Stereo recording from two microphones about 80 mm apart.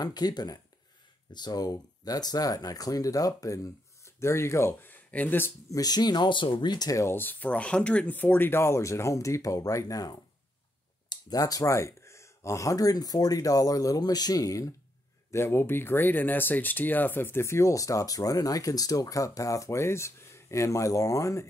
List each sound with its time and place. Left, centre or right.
0.0 s speech: left
5.7 s speech: left
7.0 s speech: left
15.3 s speech: left